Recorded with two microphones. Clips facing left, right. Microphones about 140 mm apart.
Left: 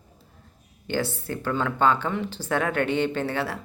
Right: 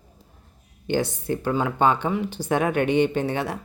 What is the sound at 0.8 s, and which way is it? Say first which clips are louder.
Speech: right 4 dB; 15° right (ahead or behind).